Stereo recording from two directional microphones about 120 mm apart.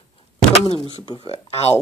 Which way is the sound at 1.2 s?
55° left (ahead or behind).